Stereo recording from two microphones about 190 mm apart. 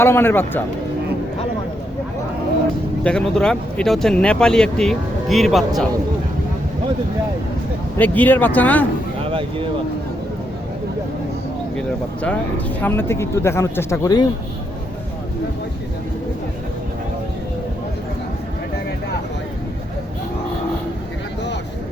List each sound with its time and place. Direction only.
0.0 s speech: 10° left (ahead or behind)
3.0 s speech: 5° left (ahead or behind)
7.9 s speech: 10° left (ahead or behind)
9.2 s speech: 30° right (ahead or behind)
11.8 s speech: 5° left (ahead or behind)